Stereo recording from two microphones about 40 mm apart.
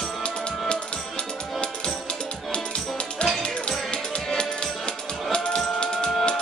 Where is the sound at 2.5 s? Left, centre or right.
Left.